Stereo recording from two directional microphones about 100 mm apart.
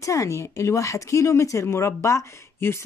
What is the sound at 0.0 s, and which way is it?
A woman's voice, 30° left (ahead or behind).